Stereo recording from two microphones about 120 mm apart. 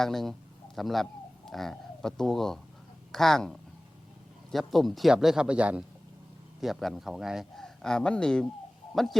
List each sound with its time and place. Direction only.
0.0 s a man's voice: centre (ahead or behind)